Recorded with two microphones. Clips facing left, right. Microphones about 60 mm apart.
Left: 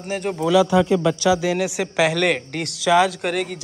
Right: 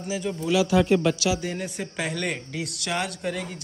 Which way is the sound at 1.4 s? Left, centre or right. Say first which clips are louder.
Left 9 dB; left.